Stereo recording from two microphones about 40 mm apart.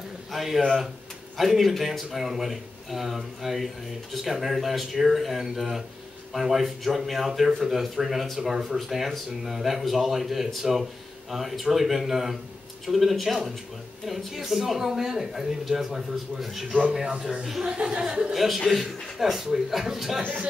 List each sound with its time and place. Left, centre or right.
0.3 s a man's voice: centre
18.3 s speech: centre